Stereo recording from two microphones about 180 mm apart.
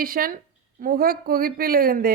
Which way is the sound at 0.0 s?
50° right (ahead or behind).